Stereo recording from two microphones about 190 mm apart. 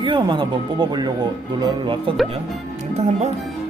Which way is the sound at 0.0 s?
25° right (ahead or behind).